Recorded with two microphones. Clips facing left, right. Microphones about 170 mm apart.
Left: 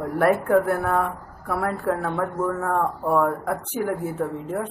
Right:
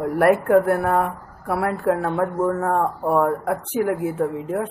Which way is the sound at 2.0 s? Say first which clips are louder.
Right 4 dB; 25° right (ahead or behind).